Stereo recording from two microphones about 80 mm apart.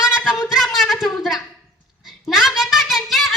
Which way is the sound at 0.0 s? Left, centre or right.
Centre.